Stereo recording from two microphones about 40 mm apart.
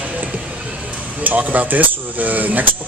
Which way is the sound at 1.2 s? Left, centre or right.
Right.